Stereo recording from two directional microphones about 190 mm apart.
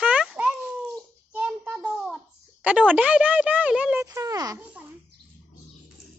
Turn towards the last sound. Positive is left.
turn(degrees=-20)  # may be behind; listen again after turning